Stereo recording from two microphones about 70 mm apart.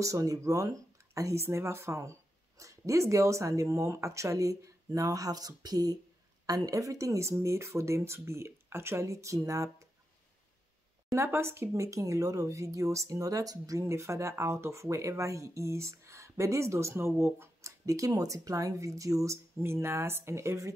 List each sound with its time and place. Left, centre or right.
0.0 s speech: right
1.4 s speech: right
11.1 s speech: right